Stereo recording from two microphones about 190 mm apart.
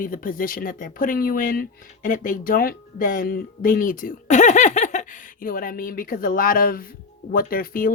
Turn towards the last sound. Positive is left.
turn(degrees=50)  # may be behind; listen again after turning